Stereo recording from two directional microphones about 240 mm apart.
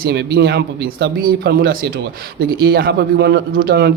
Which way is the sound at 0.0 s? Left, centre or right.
Right.